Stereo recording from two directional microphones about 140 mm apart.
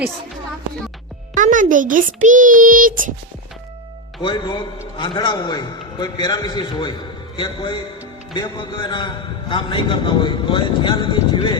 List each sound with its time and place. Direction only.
1.4 s a child's voice: 65° right (ahead or behind)
4.2 s a man's voice: 35° left (ahead or behind)